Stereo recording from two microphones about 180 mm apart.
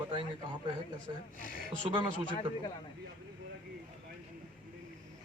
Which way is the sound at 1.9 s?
25° right (ahead or behind).